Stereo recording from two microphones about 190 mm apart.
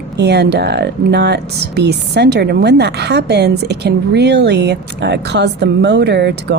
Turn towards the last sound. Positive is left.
turn(degrees=-65)  # may be behind; listen again after turning